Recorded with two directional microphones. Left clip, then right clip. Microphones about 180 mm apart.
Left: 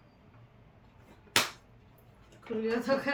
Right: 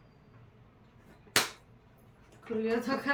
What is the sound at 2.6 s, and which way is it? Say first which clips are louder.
Speech: left 2 dB; 10° right (ahead or behind).